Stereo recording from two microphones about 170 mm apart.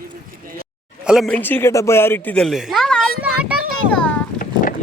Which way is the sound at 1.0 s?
Centre (ahead or behind).